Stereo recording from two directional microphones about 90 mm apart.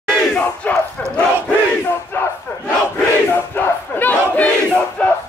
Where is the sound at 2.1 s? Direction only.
25° left (ahead or behind).